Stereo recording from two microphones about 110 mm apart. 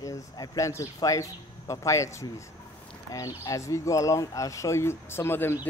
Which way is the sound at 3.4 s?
30° left (ahead or behind).